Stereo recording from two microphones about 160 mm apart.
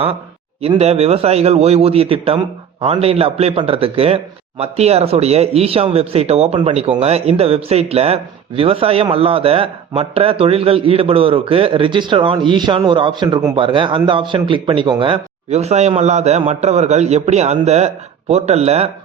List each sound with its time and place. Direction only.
0.6 s a man's voice: 40° right (ahead or behind)